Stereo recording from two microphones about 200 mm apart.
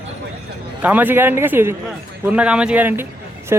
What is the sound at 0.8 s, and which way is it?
A man's voice, 10° right (ahead or behind).